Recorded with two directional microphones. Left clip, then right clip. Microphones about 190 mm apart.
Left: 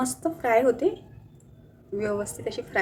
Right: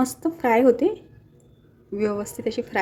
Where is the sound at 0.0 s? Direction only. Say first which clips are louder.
Right 3 dB; 40° right (ahead or behind).